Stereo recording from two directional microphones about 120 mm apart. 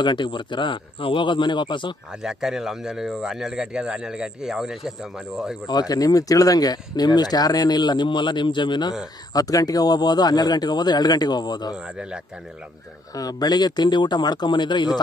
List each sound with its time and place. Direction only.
0.0 s speech: 40° left (ahead or behind)
2.2 s speech: centre (ahead or behind)
5.7 s speech: 35° left (ahead or behind)
11.7 s speech: 5° right (ahead or behind)
13.1 s speech: 30° left (ahead or behind)